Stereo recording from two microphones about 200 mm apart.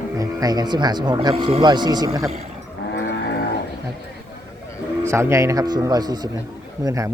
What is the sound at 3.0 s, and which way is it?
Livestock, 50° left (ahead or behind).